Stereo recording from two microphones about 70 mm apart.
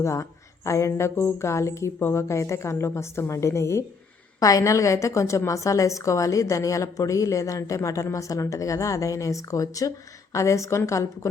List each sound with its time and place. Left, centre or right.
0.0 s a woman's voice: left
4.4 s a woman's voice: left